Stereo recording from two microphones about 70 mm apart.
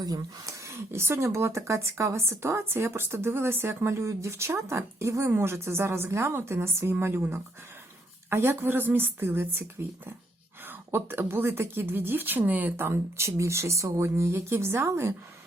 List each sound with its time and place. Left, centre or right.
0.0 s speech: right
0.4 s speech: right
10.7 s speech: right
12.7 s speech: right